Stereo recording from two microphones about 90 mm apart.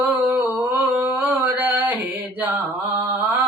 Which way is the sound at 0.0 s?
20° right (ahead or behind).